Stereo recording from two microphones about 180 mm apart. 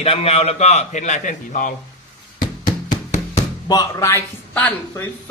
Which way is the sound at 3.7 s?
20° left (ahead or behind).